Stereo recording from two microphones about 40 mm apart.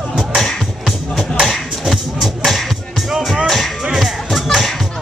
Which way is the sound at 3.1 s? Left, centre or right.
Centre.